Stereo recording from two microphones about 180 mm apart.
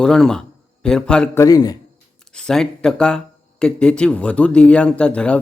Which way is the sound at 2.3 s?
5° left (ahead or behind).